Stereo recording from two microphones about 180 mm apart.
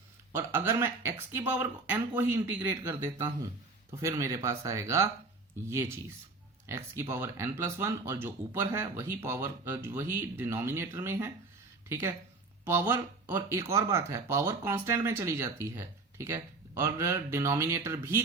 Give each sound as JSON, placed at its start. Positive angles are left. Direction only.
{"t": 0.3, "sound": "speech", "side_deg": -15}